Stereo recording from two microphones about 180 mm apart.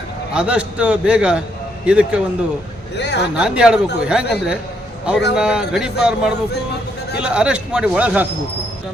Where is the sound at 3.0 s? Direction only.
70° left (ahead or behind).